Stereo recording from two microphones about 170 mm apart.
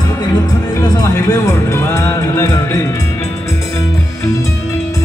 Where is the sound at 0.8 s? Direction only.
20° left (ahead or behind).